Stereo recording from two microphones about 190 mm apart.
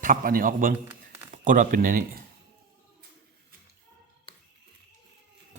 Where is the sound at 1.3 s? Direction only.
40° right (ahead or behind).